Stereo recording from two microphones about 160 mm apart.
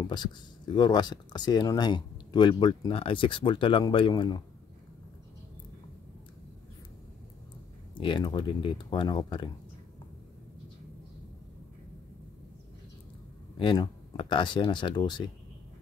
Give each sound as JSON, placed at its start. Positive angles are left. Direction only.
{"t": 0.0, "sound": "speech", "side_deg": 25}
{"t": 7.9, "sound": "speech", "side_deg": 30}
{"t": 13.6, "sound": "speech", "side_deg": 30}